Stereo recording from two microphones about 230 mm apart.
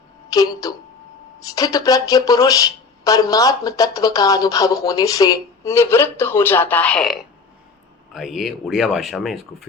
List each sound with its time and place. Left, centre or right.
0.3 s a woman's voice: centre